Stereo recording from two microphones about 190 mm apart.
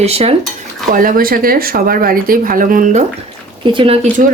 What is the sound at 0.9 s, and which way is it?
Speech, 50° right (ahead or behind).